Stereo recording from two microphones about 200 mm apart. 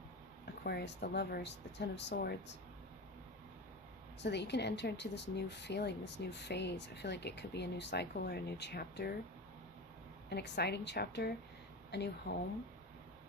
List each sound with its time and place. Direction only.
0.6 s a woman's voice: 55° left (ahead or behind)
4.2 s a woman's voice: 60° left (ahead or behind)
10.2 s a woman's voice: 60° left (ahead or behind)